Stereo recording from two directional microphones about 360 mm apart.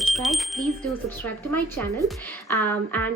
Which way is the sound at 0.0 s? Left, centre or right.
Centre.